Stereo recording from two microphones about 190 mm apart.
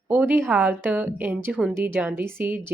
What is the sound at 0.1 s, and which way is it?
A woman's voice, 5° right (ahead or behind).